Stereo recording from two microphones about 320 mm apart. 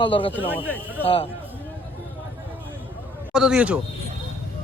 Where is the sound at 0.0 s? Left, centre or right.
Centre.